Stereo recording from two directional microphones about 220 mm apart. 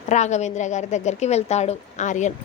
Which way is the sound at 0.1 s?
30° left (ahead or behind).